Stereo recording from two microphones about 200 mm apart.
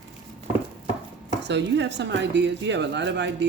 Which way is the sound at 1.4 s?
60° right (ahead or behind).